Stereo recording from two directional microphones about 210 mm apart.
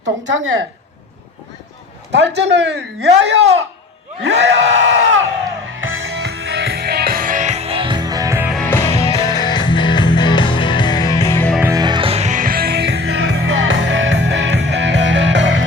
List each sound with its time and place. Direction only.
0.3 s a woman's voice: 70° right (ahead or behind)
2.1 s a man's voice: 55° right (ahead or behind)
4.2 s a sound: 55° right (ahead or behind)
5.7 s music: 70° right (ahead or behind); by 8.5 s 10° right (ahead or behind)
8.5 s music: 10° left (ahead or behind)
11.7 s music: 20° right (ahead or behind); by 15.6 s 60° right (ahead or behind)